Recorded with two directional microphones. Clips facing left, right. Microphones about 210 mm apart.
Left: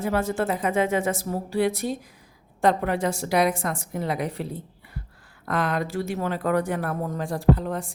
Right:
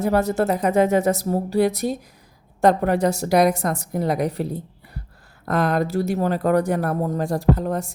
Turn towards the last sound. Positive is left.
turn(degrees=-40)  # may be behind; listen again after turning